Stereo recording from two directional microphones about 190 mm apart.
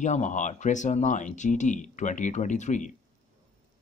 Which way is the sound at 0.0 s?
40° left (ahead or behind).